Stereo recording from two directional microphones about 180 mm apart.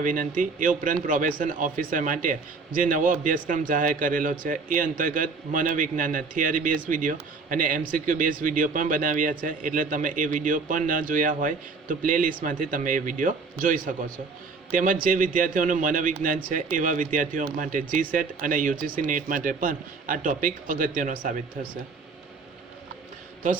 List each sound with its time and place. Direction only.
0.0 s a man's voice: 50° right (ahead or behind)